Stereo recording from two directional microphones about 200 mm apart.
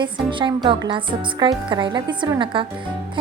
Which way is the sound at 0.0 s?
25° right (ahead or behind).